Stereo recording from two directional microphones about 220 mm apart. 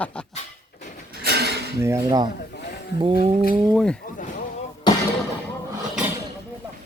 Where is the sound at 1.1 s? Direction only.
45° right (ahead or behind).